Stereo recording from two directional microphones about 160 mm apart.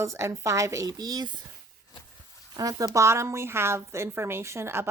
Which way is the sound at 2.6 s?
20° right (ahead or behind).